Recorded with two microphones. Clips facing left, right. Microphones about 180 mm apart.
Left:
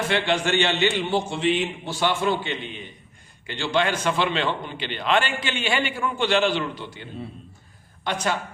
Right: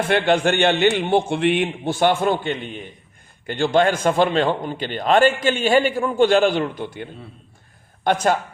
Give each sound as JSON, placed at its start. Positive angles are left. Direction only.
{"t": 0.1, "sound": "a man's voice", "side_deg": -55}